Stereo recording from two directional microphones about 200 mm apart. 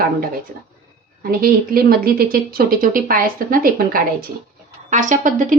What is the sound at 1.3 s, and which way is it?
A woman's voice, 45° right (ahead or behind).